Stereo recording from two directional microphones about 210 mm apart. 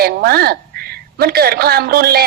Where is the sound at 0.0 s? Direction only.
50° right (ahead or behind).